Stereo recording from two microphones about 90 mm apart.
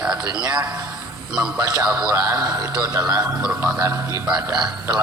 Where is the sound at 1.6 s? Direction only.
35° right (ahead or behind).